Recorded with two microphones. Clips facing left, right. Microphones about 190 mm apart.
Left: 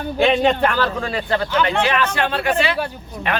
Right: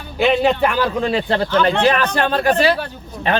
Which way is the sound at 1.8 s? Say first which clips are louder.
Right 3 dB; 40° right (ahead or behind).